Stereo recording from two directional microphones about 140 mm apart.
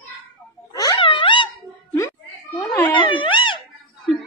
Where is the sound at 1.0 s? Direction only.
35° left (ahead or behind).